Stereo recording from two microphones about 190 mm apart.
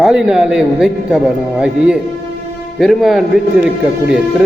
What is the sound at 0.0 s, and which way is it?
A man's voice, 5° right (ahead or behind).